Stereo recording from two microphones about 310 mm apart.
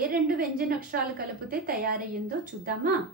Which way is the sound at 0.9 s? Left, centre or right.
Right.